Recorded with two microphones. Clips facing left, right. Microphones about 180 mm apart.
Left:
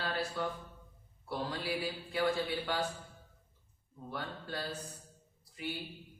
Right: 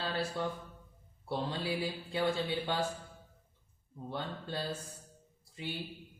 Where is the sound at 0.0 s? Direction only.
25° right (ahead or behind).